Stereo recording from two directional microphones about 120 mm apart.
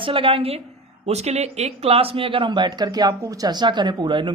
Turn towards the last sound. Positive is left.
turn(degrees=-40)  # may be behind; listen again after turning